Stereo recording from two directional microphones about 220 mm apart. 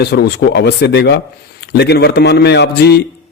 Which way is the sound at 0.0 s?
50° left (ahead or behind).